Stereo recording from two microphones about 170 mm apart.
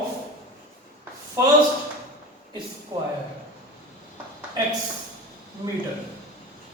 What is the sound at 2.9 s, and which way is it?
Speech, 20° right (ahead or behind).